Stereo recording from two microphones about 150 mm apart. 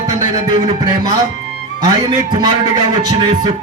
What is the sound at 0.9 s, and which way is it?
A man's voice, 25° right (ahead or behind).